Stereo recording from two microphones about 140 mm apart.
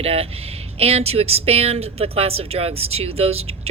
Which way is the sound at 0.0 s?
45° right (ahead or behind).